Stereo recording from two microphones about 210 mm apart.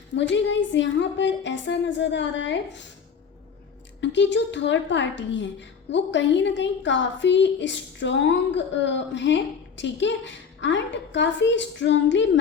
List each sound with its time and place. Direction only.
0.1 s a woman's voice: 60° left (ahead or behind)
4.0 s a woman's voice: 55° left (ahead or behind)